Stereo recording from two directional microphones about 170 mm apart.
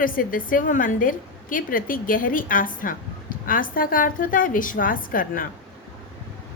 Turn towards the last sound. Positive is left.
turn(degrees=55)  # may be behind; listen again after turning